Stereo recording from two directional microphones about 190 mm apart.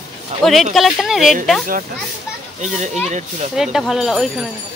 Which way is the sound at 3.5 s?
Centre (ahead or behind).